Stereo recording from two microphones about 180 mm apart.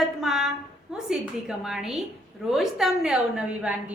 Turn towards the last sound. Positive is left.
turn(degrees=-5)  # may be behind; listen again after turning